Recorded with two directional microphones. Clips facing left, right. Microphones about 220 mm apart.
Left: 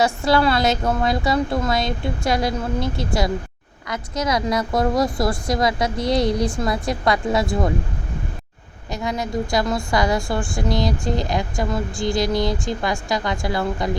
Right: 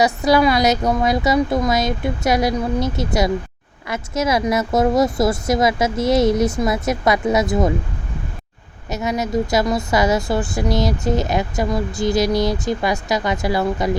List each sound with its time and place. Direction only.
0.0 s speech: 20° right (ahead or behind)
8.9 s speech: 20° right (ahead or behind)
12.2 s speech: 20° left (ahead or behind)
12.6 s speech: 20° right (ahead or behind)